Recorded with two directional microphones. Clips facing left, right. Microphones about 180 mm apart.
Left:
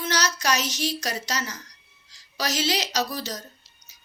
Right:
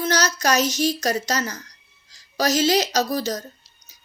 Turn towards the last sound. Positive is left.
turn(degrees=-45)  # may be behind; listen again after turning